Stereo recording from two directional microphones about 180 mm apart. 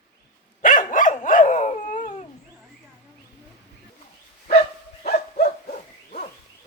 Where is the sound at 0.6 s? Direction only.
50° left (ahead or behind).